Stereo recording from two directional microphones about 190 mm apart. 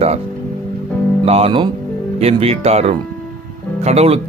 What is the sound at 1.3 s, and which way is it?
Speech, 30° right (ahead or behind).